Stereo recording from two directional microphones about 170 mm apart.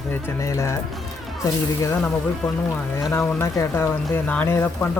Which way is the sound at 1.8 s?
15° left (ahead or behind).